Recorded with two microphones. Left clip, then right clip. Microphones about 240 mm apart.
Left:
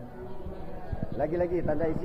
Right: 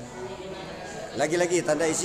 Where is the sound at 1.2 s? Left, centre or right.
Right.